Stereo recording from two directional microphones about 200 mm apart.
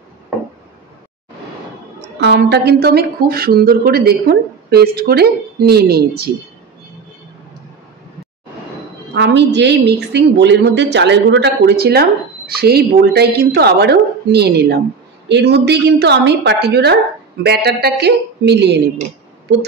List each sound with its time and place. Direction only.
2.0 s a woman's voice: 60° right (ahead or behind)
9.1 s a woman's voice: 60° right (ahead or behind)